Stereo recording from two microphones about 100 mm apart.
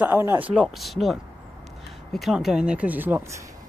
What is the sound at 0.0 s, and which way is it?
Speech, 20° right (ahead or behind).